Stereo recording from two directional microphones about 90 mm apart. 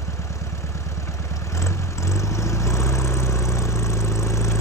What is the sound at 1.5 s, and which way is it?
Vehicle, 35° left (ahead or behind).